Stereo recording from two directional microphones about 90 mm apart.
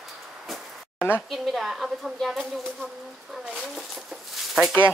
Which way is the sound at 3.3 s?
5° right (ahead or behind).